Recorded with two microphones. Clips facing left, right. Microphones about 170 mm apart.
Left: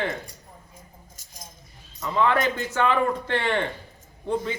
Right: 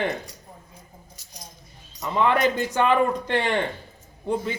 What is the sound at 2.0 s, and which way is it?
A man's voice, 20° right (ahead or behind).